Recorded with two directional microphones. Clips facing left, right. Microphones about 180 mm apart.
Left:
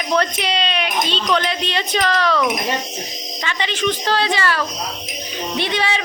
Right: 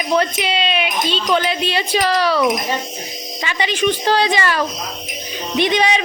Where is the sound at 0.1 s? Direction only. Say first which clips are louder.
Right 1 dB; 5° right (ahead or behind).